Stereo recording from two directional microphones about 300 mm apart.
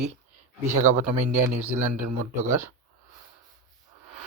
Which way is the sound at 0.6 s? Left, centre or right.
Right.